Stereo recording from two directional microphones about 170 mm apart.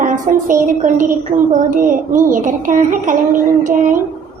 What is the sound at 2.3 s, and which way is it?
A child's voice, 50° right (ahead or behind).